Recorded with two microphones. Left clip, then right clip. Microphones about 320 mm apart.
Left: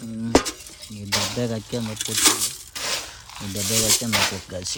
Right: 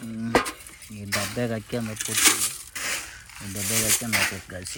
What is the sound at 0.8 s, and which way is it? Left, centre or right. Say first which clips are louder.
Cutlery: left 4 dB; centre.